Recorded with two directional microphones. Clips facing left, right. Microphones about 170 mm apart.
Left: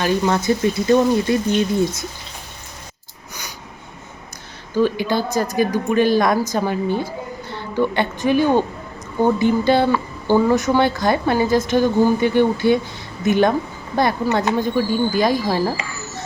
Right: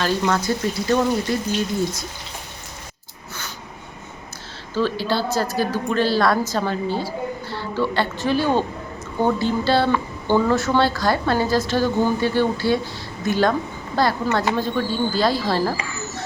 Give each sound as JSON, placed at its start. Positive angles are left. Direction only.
{"t": 0.0, "sound": "speech", "side_deg": 20}
{"t": 4.7, "sound": "speech", "side_deg": 15}